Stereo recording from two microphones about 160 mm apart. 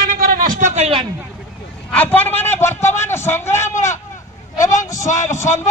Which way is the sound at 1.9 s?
10° left (ahead or behind).